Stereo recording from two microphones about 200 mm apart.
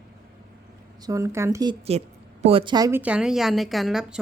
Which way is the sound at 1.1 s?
15° right (ahead or behind).